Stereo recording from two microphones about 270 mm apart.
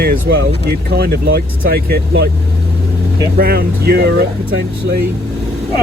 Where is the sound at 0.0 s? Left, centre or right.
Right.